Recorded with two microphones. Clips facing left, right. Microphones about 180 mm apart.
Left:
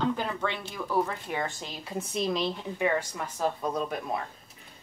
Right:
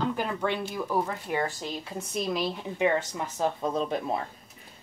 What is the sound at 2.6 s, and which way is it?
Speech, 20° right (ahead or behind).